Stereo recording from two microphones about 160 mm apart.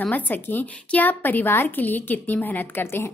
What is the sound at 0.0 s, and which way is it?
Speech, 10° left (ahead or behind).